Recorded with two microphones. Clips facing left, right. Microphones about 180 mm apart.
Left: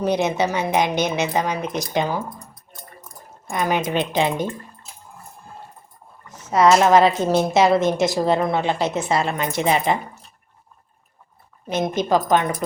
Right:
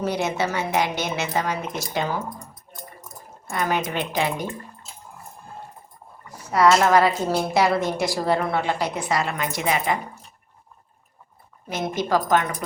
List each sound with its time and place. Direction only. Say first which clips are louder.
0.0 s a woman's voice: left 4 dB; 20° left (ahead or behind)
3.5 s a woman's voice: left 3 dB; 15° left (ahead or behind)
6.2 s a woman's voice: left 2 dB; 20° left (ahead or behind)
11.7 s a woman's voice: left 3 dB; 20° left (ahead or behind)